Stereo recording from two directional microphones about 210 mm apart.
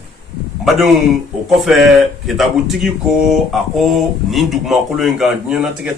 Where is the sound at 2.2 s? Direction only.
Centre (ahead or behind).